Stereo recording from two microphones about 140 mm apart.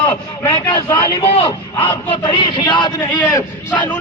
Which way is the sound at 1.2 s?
45° left (ahead or behind).